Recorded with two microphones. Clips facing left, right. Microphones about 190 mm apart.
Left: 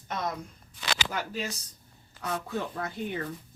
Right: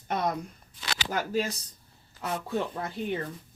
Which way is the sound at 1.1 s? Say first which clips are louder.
Right 5 dB; 40° right (ahead or behind).